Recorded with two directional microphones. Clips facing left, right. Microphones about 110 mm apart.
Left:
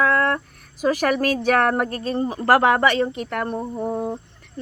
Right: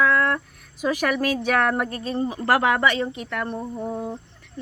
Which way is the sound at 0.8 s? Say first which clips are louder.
Left 3 dB; 40° left (ahead or behind).